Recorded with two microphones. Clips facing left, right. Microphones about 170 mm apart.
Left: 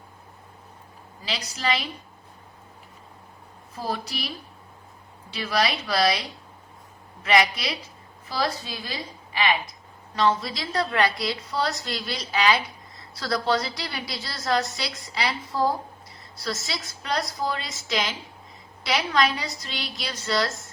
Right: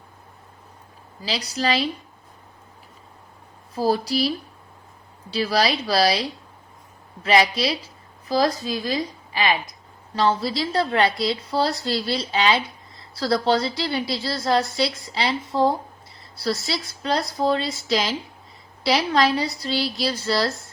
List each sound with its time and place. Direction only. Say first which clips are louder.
1.2 s a woman's voice: right 5 dB; 35° right (ahead or behind)
3.8 s a woman's voice: right 10 dB; 35° right (ahead or behind)